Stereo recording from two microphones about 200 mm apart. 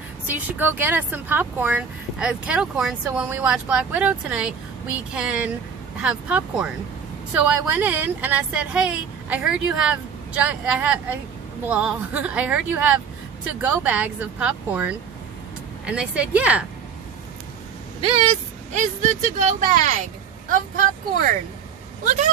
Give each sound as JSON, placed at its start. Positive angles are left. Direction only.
{"t": 0.3, "sound": "speech", "side_deg": -10}
{"t": 18.0, "sound": "speech", "side_deg": -35}
{"t": 22.0, "sound": "speech", "side_deg": -35}